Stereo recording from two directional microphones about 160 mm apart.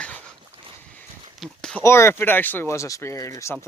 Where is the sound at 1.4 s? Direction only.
5° left (ahead or behind).